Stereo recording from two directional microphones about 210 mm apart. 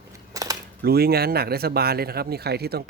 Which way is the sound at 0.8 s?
50° right (ahead or behind).